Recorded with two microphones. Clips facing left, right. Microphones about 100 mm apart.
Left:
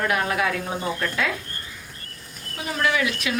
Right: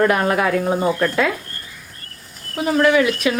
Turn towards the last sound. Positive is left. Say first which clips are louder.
# right 8 dB
turn(degrees=-40)  # may be behind; listen again after turning